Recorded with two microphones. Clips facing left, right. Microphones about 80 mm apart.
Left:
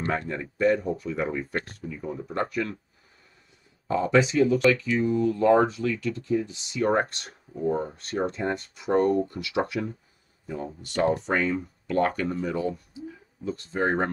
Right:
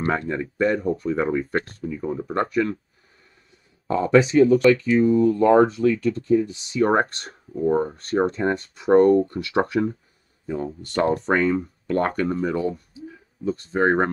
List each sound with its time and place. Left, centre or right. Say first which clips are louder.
0.3 s speech: right 2 dB; right
3.8 s speech: right 4 dB; right